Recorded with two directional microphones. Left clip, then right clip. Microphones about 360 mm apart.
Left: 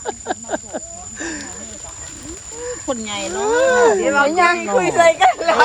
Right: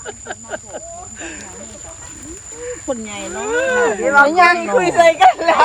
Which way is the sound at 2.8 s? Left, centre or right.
Centre.